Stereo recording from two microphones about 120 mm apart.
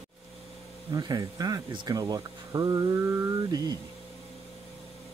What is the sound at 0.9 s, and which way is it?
Speech, 35° right (ahead or behind).